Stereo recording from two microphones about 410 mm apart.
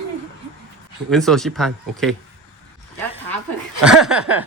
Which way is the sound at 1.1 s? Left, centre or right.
Centre.